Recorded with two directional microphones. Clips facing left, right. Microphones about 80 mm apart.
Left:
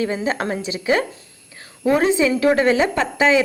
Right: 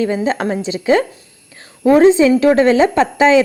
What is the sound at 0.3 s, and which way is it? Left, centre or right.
Speech, right.